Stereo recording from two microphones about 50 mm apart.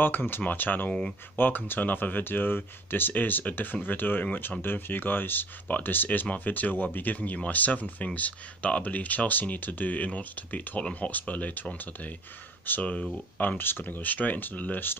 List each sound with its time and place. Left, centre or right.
0.0 s speech: left
12.6 s speech: left